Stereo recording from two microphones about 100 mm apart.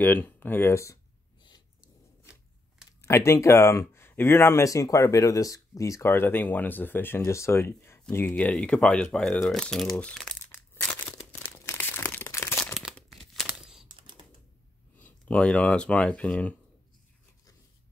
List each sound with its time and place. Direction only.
0.0 s speech: 20° left (ahead or behind)
3.1 s speech: 25° left (ahead or behind)
8.5 s speech: 5° left (ahead or behind)
10.5 s crumpling: 20° left (ahead or behind)
12.3 s a sound: 25° left (ahead or behind)
12.7 s crumpling: centre (ahead or behind)
13.5 s computer keyboard: 5° right (ahead or behind)
13.8 s typing: 55° right (ahead or behind)
15.0 s speech: 15° left (ahead or behind)